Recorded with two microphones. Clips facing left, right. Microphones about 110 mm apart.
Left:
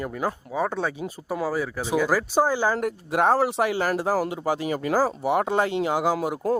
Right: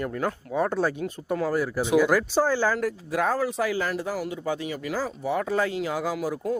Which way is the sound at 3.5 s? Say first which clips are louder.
Left 3 dB; 30° left (ahead or behind).